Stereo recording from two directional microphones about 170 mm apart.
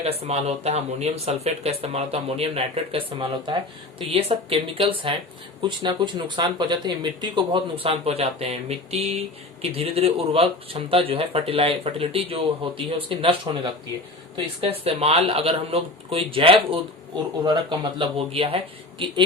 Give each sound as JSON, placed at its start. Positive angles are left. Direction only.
{"t": 0.0, "sound": "speech", "side_deg": -35}
{"t": 14.6, "sound": "speech", "side_deg": -35}